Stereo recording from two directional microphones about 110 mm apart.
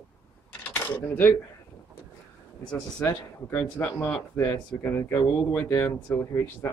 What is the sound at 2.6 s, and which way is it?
Speech, 10° left (ahead or behind).